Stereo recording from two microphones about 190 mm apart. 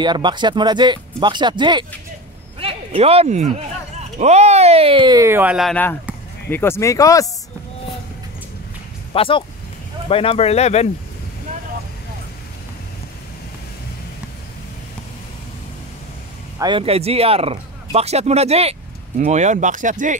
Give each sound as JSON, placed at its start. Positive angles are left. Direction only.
{"t": 0.0, "sound": "speech", "side_deg": -25}
{"t": 9.1, "sound": "speech", "side_deg": 30}
{"t": 16.5, "sound": "speech", "side_deg": -25}